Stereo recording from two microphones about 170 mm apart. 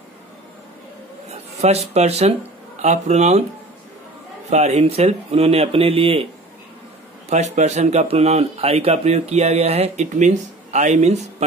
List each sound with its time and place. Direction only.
1.3 s speech: 40° right (ahead or behind)
4.5 s speech: 40° right (ahead or behind)
7.2 s speech: 40° right (ahead or behind)